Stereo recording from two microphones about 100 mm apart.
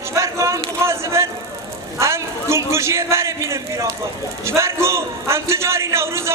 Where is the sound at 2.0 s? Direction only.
30° right (ahead or behind).